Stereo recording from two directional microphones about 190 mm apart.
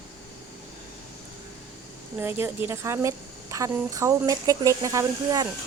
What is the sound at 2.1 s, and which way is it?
A woman's voice, 10° right (ahead or behind).